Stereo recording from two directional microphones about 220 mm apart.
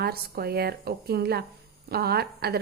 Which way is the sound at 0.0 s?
45° right (ahead or behind).